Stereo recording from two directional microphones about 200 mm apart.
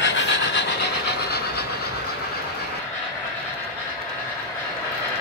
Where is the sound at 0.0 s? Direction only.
65° left (ahead or behind).